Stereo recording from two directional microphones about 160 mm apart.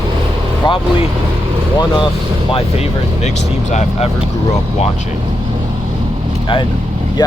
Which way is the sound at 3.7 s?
45° left (ahead or behind).